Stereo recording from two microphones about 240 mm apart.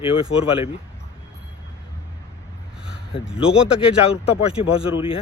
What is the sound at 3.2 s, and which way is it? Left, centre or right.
Speech, centre.